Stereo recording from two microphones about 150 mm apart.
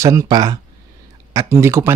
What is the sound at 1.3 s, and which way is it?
Speech, 20° right (ahead or behind).